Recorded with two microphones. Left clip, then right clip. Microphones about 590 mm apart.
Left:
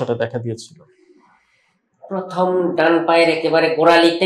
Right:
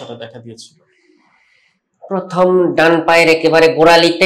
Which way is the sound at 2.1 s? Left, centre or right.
Right.